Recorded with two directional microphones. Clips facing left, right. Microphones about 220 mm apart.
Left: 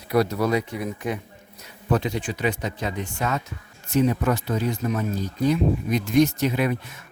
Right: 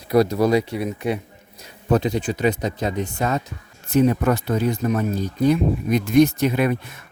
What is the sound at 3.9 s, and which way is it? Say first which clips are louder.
Speech: right 4 dB; 55° right (ahead or behind).